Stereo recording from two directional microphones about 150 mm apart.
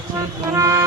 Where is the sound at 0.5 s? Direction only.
20° right (ahead or behind).